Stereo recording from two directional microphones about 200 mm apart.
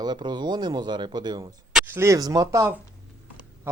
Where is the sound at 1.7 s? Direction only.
10° right (ahead or behind).